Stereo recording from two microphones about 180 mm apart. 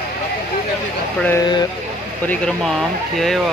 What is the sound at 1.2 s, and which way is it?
Speech, 15° left (ahead or behind).